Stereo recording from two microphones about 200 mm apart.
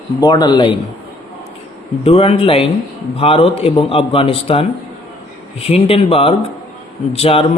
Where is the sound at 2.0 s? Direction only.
30° left (ahead or behind).